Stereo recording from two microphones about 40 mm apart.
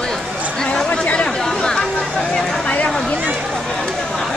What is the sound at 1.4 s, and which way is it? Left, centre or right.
Chatter, centre.